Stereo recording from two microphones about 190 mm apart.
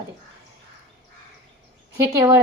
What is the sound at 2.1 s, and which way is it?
Speech, 15° right (ahead or behind).